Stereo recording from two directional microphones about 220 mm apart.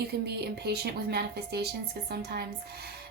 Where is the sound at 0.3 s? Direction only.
50° right (ahead or behind).